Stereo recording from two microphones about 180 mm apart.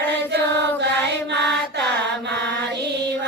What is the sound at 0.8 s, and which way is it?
Mantra, 70° right (ahead or behind).